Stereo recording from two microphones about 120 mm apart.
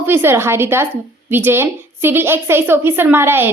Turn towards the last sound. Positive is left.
turn(degrees=-20)  # may be behind; listen again after turning